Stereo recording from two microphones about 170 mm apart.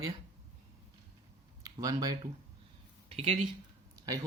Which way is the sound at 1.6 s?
20° right (ahead or behind).